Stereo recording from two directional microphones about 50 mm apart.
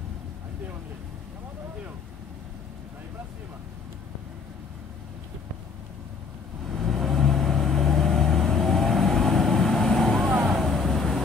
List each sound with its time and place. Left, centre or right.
6.7 s vehicle: centre